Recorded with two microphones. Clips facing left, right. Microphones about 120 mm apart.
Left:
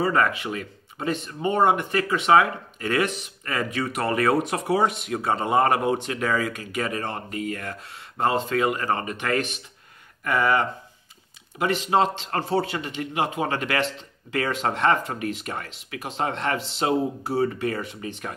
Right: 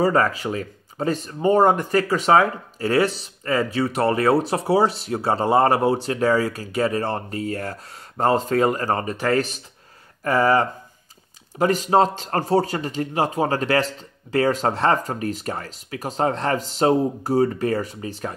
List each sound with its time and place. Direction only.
0.0 s speech: 35° right (ahead or behind)